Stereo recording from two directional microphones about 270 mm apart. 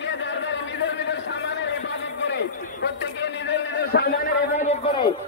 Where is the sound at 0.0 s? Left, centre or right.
Left; by 5.1 s centre.